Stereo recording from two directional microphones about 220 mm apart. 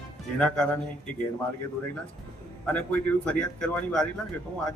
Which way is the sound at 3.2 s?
5° left (ahead or behind).